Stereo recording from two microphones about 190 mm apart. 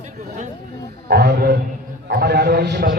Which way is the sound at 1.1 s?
60° right (ahead or behind).